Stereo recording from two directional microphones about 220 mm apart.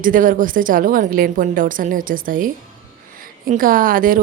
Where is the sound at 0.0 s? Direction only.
40° right (ahead or behind).